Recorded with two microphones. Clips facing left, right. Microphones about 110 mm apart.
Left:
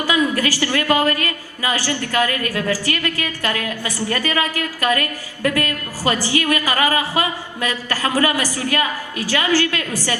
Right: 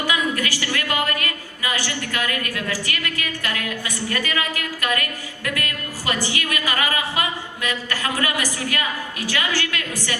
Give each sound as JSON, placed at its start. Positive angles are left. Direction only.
{"t": 0.0, "sound": "a woman's voice", "side_deg": 35}